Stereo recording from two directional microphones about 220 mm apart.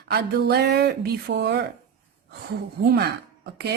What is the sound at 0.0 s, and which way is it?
Speech, 45° right (ahead or behind).